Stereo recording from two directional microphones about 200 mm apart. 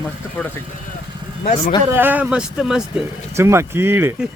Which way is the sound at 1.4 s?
30° left (ahead or behind).